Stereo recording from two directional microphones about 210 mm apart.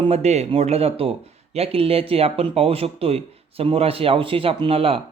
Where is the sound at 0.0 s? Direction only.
30° right (ahead or behind).